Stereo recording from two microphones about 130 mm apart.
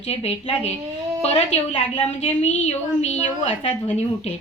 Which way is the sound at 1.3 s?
50° left (ahead or behind).